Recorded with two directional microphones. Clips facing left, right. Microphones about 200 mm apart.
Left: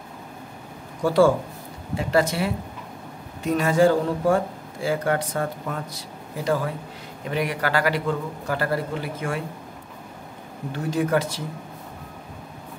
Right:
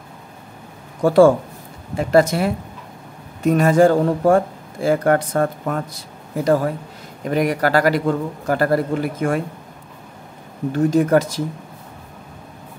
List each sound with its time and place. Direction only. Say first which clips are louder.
1.0 s a man's voice: right 6 dB; 50° right (ahead or behind)
10.7 s a man's voice: right 8 dB; 45° right (ahead or behind)